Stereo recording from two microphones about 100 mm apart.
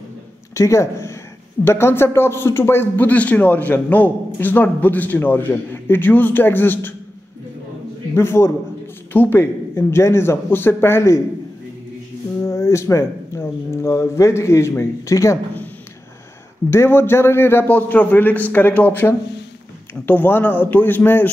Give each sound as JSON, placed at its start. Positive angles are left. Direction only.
{"t": 0.6, "sound": "speech", "side_deg": 30}
{"t": 8.1, "sound": "speech", "side_deg": 25}
{"t": 12.4, "sound": "speech", "side_deg": 30}
{"t": 16.7, "sound": "speech", "side_deg": 25}